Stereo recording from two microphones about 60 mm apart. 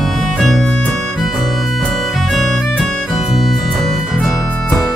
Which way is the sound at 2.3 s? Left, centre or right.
Centre.